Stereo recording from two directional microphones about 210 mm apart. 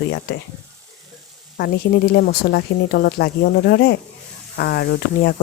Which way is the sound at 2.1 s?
50° left (ahead or behind).